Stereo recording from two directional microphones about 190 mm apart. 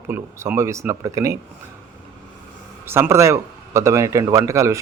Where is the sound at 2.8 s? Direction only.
10° right (ahead or behind).